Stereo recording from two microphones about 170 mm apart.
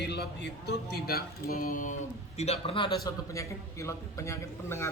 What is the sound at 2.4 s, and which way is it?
A man's voice, 35° left (ahead or behind).